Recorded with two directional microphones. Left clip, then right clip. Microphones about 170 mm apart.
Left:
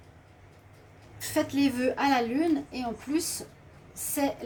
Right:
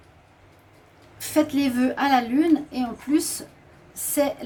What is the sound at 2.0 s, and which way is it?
A woman's voice, 50° right (ahead or behind).